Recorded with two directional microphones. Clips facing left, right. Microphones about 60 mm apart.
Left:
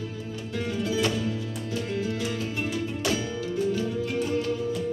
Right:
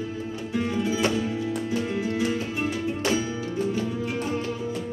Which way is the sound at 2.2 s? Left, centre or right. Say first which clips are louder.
Right 4 dB; right.